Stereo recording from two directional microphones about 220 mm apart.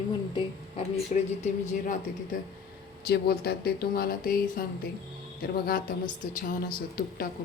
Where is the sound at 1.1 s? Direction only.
30° left (ahead or behind).